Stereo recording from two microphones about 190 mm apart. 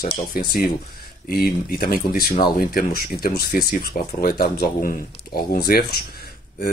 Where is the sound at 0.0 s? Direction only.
50° left (ahead or behind).